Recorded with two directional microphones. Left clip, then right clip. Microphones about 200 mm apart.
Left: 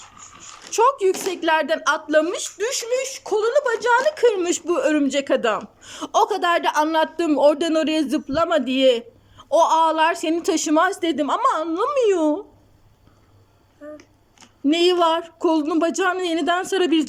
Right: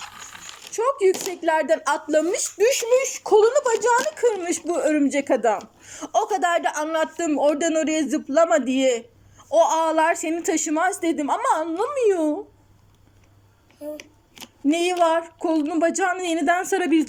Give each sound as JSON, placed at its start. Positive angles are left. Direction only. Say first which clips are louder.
{"t": 0.7, "sound": "speech", "louder": "left 3 dB", "side_deg": 65}
{"t": 1.3, "sound": "a woman's voice", "louder": "left 1 dB", "side_deg": 0}
{"t": 14.7, "sound": "speech", "louder": "left 2 dB", "side_deg": 10}